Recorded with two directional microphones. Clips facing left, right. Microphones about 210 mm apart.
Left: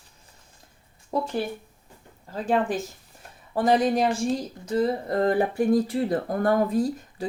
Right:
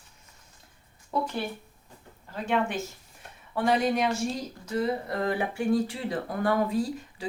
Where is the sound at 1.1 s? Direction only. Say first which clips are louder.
Left 3 dB; 35° left (ahead or behind).